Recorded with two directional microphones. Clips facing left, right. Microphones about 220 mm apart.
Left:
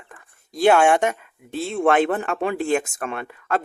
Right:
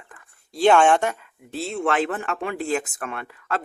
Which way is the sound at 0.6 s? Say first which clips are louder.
Left 1 dB; 10° left (ahead or behind).